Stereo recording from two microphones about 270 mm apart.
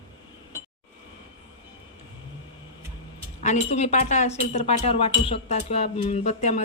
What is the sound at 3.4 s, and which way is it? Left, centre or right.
Speech, left.